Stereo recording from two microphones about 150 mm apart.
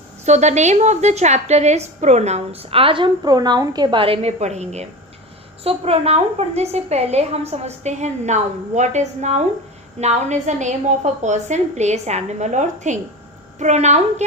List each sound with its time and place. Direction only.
0.3 s a woman's voice: 50° right (ahead or behind)